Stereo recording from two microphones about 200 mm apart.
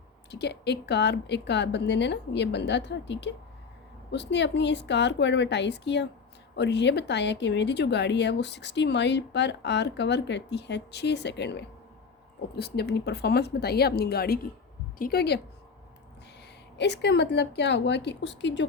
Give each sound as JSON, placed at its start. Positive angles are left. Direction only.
{"t": 0.3, "sound": "a woman's voice", "side_deg": 55}
{"t": 16.7, "sound": "speech", "side_deg": 60}